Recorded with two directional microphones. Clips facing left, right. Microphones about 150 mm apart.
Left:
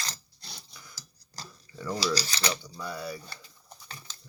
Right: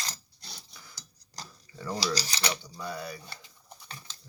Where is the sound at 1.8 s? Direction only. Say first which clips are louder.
Left 2 dB; 20° right (ahead or behind).